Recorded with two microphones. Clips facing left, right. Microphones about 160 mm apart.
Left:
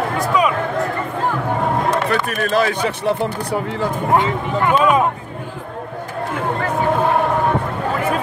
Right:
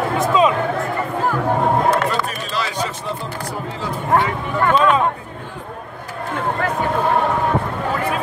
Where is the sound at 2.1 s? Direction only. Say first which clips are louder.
Left 4 dB; 55° left (ahead or behind).